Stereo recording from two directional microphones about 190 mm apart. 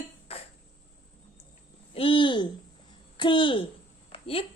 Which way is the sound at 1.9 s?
25° left (ahead or behind).